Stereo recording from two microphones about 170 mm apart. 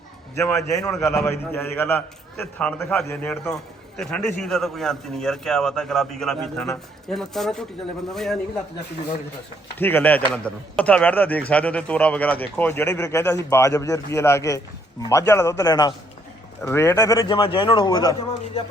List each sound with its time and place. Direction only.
0.3 s a man's voice: 15° left (ahead or behind)
9.7 s a man's voice: 10° left (ahead or behind)